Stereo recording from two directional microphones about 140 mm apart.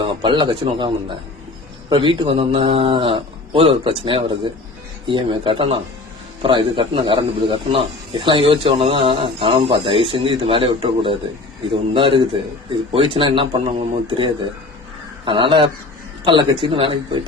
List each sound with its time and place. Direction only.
0.0 s a man's voice: 35° right (ahead or behind)